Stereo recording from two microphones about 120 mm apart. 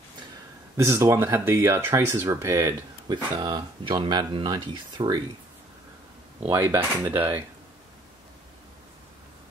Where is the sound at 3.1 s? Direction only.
35° right (ahead or behind).